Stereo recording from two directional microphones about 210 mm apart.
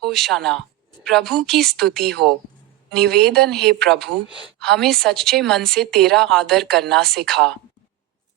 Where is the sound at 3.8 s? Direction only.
Centre (ahead or behind).